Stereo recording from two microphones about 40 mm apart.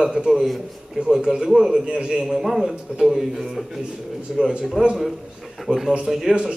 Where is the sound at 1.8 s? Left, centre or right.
Right.